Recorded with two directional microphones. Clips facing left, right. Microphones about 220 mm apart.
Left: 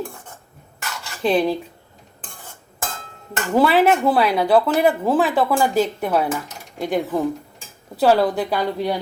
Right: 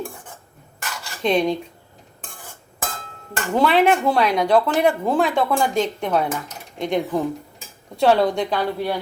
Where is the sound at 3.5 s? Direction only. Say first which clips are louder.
Left 1 dB; 5° left (ahead or behind).